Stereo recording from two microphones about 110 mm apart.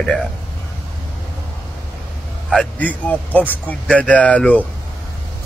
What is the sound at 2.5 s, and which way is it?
Speech, 10° left (ahead or behind).